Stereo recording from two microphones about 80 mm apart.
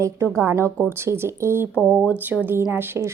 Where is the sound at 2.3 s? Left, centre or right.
Right.